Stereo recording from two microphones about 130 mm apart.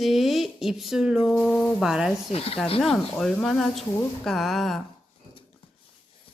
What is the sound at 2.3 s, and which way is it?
Speech, 50° left (ahead or behind).